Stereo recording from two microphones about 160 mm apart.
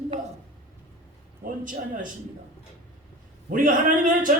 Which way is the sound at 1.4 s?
55° right (ahead or behind).